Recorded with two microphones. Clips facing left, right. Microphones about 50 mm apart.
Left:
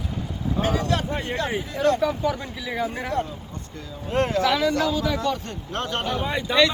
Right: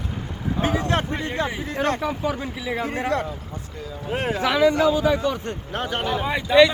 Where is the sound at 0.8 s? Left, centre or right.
Right.